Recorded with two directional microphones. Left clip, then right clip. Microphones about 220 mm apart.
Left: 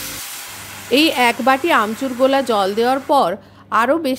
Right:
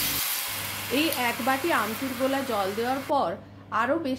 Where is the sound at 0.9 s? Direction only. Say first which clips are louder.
Left 12 dB; 50° left (ahead or behind).